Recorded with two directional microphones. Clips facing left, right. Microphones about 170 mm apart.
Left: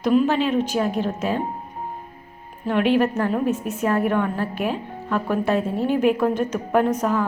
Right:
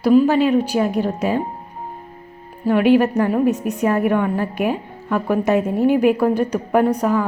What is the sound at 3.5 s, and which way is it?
Speech, 40° right (ahead or behind).